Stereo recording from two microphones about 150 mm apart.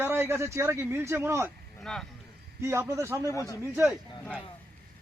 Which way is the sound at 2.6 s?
15° right (ahead or behind).